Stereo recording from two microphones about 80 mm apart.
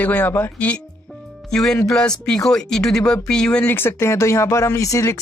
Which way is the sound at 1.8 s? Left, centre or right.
Centre.